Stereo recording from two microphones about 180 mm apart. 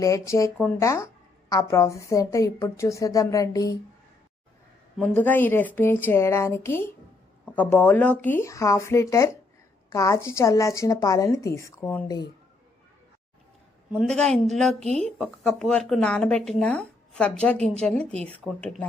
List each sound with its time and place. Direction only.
0.0 s speech: 15° left (ahead or behind)
4.9 s speech: 10° left (ahead or behind)
14.1 s speech: centre (ahead or behind)